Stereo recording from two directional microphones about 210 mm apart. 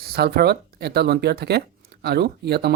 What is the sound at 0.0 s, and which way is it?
Speech, 45° right (ahead or behind).